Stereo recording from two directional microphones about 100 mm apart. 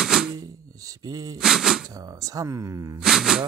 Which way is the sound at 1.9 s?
35° right (ahead or behind).